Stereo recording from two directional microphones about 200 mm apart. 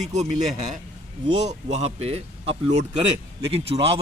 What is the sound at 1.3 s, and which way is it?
A man's voice, 35° right (ahead or behind).